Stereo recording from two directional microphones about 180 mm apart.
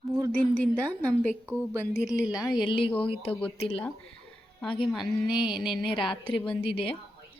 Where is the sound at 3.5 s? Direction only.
30° left (ahead or behind).